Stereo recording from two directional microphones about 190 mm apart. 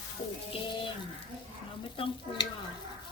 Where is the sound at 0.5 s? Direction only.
25° left (ahead or behind).